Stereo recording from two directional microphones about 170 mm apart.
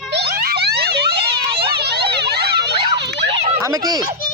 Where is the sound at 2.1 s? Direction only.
75° right (ahead or behind).